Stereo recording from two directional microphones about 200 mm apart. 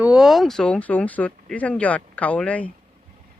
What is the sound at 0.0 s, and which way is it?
Speech, 5° right (ahead or behind).